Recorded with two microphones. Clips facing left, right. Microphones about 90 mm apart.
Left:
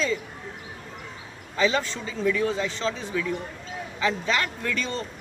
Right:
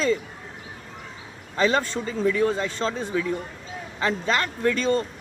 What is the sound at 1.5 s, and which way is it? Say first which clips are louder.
A woman's voice: right 2 dB; 45° right (ahead or behind).